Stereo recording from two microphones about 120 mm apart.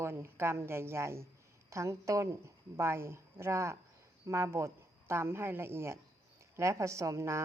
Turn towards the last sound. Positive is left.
turn(degrees=-25)  # may be behind; listen again after turning